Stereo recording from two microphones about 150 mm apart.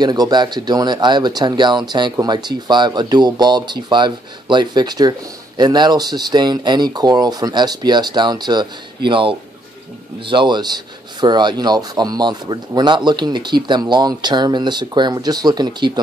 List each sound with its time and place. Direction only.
0.0 s speech: 25° right (ahead or behind)